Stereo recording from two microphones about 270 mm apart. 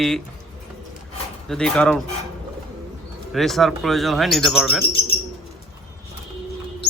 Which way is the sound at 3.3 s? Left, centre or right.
Centre.